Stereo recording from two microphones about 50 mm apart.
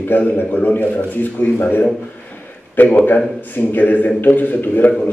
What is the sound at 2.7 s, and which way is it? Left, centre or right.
A man's voice, left.